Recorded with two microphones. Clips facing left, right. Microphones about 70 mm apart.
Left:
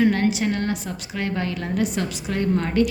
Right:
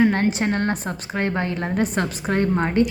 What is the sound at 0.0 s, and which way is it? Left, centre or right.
A woman's voice, right.